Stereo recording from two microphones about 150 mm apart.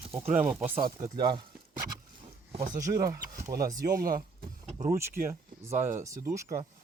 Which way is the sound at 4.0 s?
75° right (ahead or behind).